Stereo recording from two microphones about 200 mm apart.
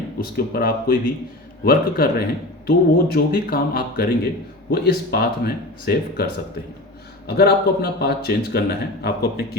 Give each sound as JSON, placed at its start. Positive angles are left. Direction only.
{"t": 0.2, "sound": "speech", "side_deg": 50}